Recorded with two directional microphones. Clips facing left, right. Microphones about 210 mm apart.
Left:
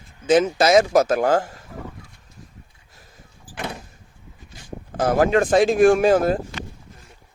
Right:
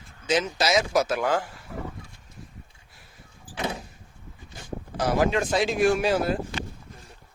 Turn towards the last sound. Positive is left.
turn(degrees=50)  # may be behind; listen again after turning